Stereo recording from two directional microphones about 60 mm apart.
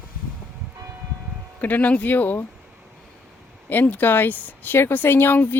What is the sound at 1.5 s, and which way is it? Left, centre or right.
Speech, left.